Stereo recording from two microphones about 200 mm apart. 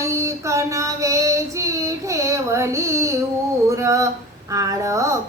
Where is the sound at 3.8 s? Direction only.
15° right (ahead or behind).